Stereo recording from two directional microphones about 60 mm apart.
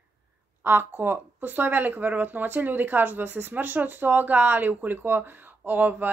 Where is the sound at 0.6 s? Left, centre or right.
Right.